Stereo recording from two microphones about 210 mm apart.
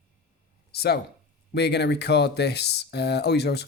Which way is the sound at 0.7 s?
50° left (ahead or behind).